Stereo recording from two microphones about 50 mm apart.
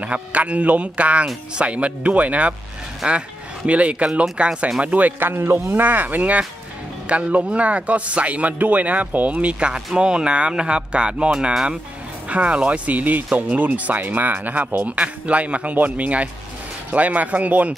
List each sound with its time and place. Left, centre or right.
0.0 s a man's voice: right
5.3 s speech: right
5.9 s a man's voice: right
14.9 s a man's voice: right